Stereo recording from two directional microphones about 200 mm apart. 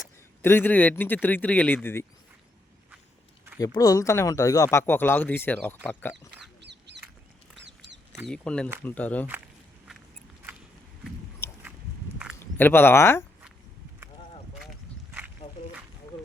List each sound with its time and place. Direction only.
0.4 s speech: 10° left (ahead or behind)
3.6 s speech: 15° left (ahead or behind)
6.6 s duck: 60° right (ahead or behind)
8.1 s speech: centre (ahead or behind)
12.4 s speech: 10° left (ahead or behind)